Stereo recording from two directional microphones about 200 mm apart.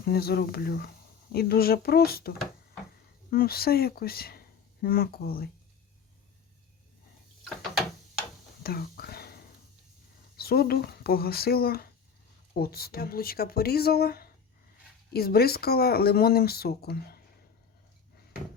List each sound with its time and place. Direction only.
0.0 s speech: 50° left (ahead or behind)
8.6 s whispering: 50° left (ahead or behind)
10.3 s speech: 50° left (ahead or behind)